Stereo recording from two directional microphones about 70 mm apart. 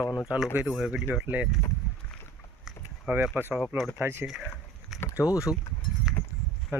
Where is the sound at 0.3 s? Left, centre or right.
Centre.